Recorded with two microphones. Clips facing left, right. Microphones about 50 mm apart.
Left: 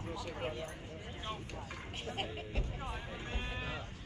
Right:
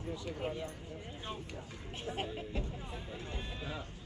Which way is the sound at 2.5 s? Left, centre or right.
Left.